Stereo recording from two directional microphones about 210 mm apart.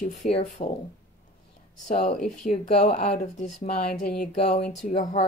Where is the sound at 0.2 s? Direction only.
40° left (ahead or behind).